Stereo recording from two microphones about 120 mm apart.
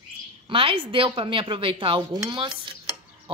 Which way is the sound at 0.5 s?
50° right (ahead or behind).